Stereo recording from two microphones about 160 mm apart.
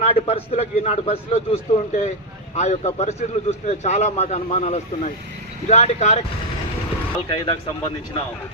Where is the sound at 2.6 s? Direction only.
45° left (ahead or behind).